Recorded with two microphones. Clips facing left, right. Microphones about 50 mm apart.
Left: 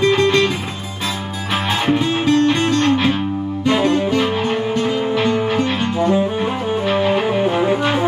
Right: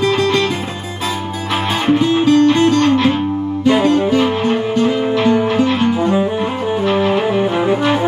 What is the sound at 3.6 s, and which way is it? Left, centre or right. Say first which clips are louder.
Music: right 3 dB; centre.